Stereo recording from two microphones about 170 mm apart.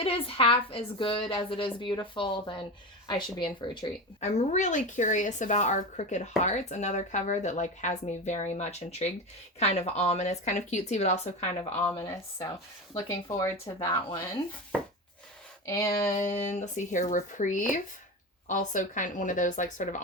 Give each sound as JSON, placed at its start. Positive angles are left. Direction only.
{"t": 0.0, "sound": "a woman's voice", "side_deg": 35}
{"t": 4.2, "sound": "a woman's voice", "side_deg": 40}
{"t": 11.7, "sound": "speech", "side_deg": 10}
{"t": 13.2, "sound": "speech", "side_deg": 25}
{"t": 15.6, "sound": "speech", "side_deg": 15}
{"t": 16.1, "sound": "a woman's voice", "side_deg": 45}